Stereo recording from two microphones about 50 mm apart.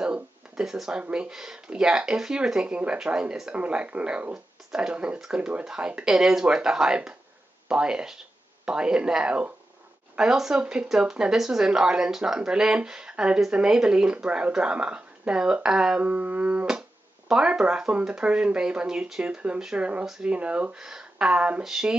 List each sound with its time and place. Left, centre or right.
0.0 s a sound: centre
0.7 s speech: centre
10.3 s speech: centre
16.0 s speech: right
20.7 s speech: centre
21.6 s speech: centre